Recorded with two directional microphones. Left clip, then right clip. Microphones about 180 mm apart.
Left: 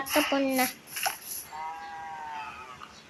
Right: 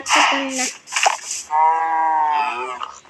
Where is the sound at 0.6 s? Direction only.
55° right (ahead or behind).